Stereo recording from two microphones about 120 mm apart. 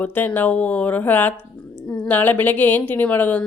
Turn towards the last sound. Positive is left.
turn(degrees=15)  # may be behind; listen again after turning